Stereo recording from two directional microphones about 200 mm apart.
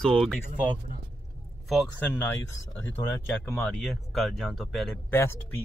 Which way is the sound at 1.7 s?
Centre (ahead or behind).